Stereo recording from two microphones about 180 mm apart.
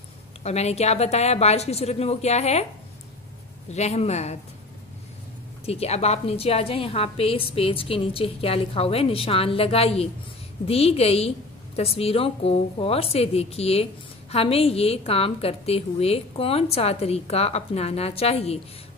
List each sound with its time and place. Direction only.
0.4 s a woman's voice: 35° left (ahead or behind)
3.7 s a woman's voice: 35° left (ahead or behind)
5.7 s a woman's voice: 35° left (ahead or behind)